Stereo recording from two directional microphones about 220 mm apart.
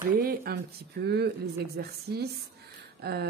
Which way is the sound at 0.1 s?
40° right (ahead or behind).